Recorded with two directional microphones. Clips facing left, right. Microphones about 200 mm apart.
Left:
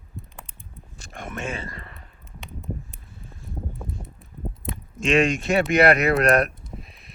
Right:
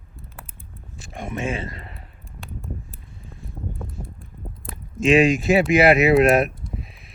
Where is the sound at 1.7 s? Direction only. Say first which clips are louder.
Right 2 dB; 30° right (ahead or behind).